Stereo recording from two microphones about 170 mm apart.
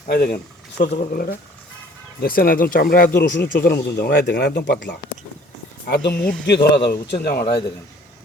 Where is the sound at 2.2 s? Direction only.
60° left (ahead or behind); by 4.9 s 85° left.